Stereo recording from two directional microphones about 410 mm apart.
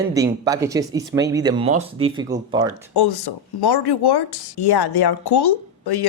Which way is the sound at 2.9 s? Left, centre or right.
Left.